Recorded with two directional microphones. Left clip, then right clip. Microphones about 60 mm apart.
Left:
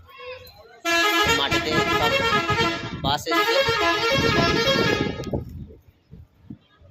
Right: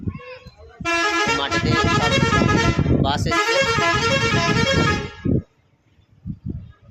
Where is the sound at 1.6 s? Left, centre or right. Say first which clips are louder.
Right 2 dB; right.